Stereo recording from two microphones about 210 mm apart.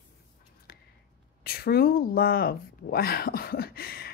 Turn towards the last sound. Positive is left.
turn(degrees=45)  # may be behind; listen again after turning